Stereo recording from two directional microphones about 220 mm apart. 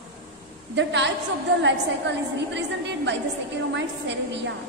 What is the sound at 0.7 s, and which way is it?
A woman's voice, 55° right (ahead or behind).